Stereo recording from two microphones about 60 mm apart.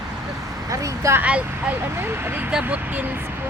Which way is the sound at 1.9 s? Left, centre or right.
Right.